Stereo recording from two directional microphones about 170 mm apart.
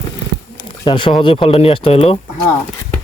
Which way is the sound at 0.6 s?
30° left (ahead or behind).